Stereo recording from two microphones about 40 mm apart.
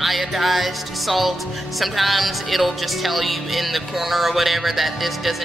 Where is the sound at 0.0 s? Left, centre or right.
Centre.